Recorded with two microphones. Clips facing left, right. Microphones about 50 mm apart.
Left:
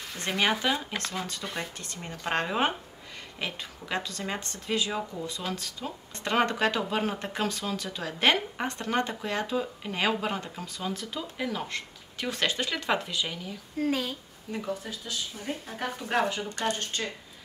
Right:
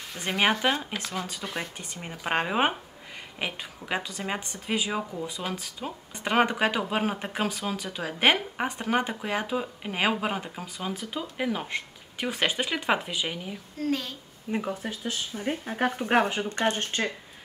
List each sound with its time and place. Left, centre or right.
0.1 s speech: centre
13.7 s speech: centre
14.5 s speech: right